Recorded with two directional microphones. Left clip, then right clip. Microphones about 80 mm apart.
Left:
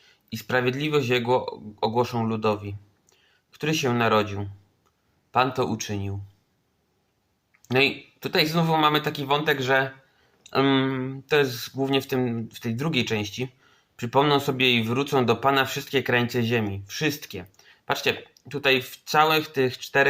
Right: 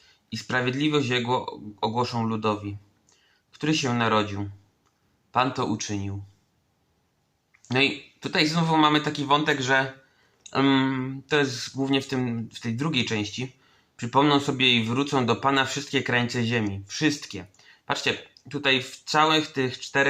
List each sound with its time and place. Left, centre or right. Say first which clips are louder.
0.0 s speech: right 1 dB; left
7.7 s speech: left 2 dB; left